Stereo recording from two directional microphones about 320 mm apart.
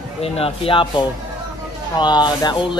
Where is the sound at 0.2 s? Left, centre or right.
Centre.